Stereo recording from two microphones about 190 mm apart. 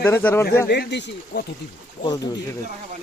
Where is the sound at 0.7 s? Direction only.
65° left (ahead or behind).